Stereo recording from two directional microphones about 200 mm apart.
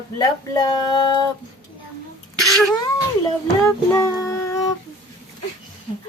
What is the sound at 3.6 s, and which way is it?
Child singing, 10° left (ahead or behind).